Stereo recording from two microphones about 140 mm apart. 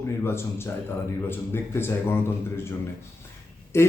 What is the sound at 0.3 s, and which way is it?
Speech, 15° left (ahead or behind).